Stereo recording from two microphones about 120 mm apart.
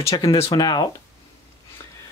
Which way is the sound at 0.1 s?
40° left (ahead or behind).